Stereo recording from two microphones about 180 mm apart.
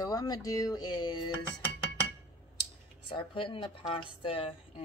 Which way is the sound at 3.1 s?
30° left (ahead or behind).